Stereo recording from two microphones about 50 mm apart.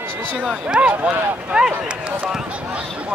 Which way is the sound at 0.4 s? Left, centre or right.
Centre.